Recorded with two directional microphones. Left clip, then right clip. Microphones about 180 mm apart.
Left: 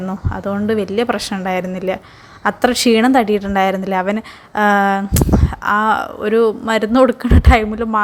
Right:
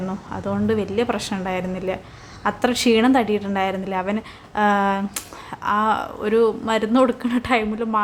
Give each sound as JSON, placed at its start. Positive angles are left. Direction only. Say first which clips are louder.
{"t": 0.1, "sound": "a woman's voice", "louder": "left 5 dB", "side_deg": 25}